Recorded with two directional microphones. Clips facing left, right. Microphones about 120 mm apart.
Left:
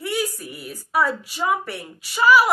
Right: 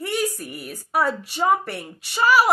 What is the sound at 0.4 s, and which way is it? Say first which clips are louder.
Speech: right 1 dB; 55° right (ahead or behind).